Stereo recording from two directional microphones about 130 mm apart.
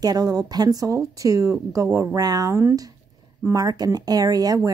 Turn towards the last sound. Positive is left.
turn(degrees=-30)  # may be behind; listen again after turning